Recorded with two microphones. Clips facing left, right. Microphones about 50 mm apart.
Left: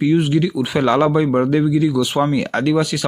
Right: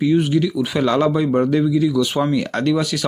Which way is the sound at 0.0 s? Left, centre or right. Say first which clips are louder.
Left 1 dB; left.